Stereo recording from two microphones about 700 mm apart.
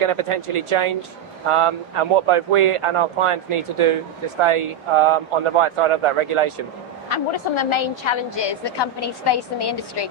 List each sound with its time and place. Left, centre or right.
0.0 s speech: right
7.1 s a woman's voice: left